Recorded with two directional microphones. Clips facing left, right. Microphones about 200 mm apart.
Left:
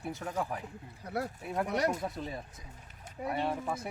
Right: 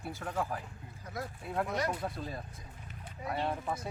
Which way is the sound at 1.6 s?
65° left (ahead or behind).